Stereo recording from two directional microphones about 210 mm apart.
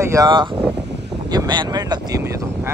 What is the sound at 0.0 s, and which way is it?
Speech, 15° right (ahead or behind).